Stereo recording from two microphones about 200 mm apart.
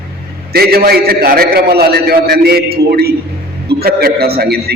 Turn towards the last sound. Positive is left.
turn(degrees=-50)  # may be behind; listen again after turning